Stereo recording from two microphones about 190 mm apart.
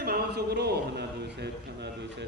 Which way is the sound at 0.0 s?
55° right (ahead or behind).